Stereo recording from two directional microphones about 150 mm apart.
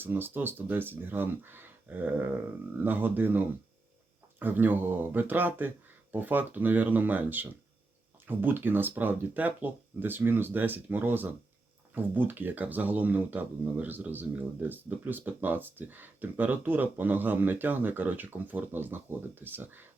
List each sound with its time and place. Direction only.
0.0 s speech: 15° right (ahead or behind)